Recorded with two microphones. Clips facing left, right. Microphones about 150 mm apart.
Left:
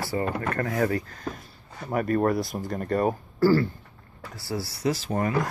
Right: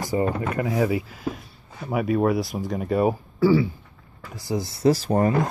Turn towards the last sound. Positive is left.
turn(degrees=-40)  # may be behind; listen again after turning